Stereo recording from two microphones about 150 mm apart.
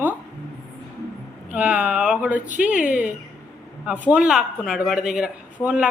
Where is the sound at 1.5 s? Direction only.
10° right (ahead or behind).